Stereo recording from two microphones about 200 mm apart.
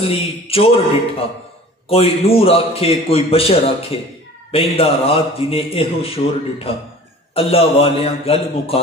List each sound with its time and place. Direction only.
0.0 s a man's voice: 30° left (ahead or behind)
1.9 s a man's voice: 30° left (ahead or behind)